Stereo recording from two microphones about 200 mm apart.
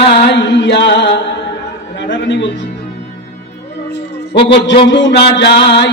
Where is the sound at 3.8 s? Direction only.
55° left (ahead or behind).